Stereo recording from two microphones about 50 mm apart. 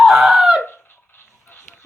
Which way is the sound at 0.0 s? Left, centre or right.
Centre.